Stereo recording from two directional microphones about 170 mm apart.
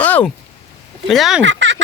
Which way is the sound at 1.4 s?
90° right.